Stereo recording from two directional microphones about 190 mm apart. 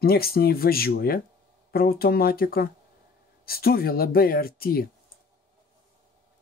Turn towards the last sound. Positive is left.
turn(degrees=50)  # may be behind; listen again after turning